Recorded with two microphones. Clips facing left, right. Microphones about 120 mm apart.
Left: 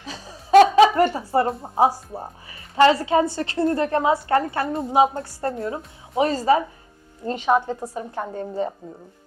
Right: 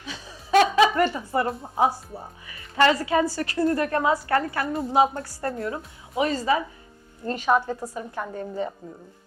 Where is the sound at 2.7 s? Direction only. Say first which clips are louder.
Left 4 dB; 25° left (ahead or behind).